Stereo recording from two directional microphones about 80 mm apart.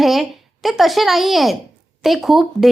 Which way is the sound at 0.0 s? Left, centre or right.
Centre.